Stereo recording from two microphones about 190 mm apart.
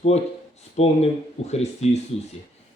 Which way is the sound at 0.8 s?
35° left (ahead or behind).